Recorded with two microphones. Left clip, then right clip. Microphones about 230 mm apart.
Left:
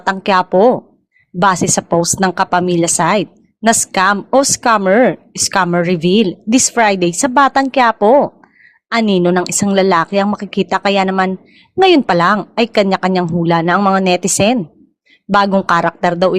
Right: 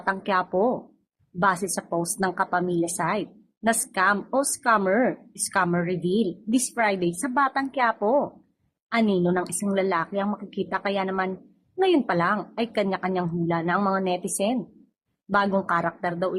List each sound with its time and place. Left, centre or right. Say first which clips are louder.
0.0 s a woman's voice: left 11 dB; left